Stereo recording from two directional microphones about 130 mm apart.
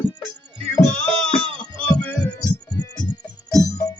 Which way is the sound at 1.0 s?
5° left (ahead or behind).